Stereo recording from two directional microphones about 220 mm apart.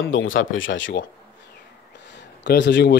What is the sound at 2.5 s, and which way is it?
Speech, 50° left (ahead or behind).